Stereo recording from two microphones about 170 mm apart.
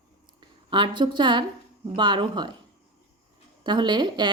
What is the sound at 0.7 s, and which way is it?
Speech, 30° right (ahead or behind).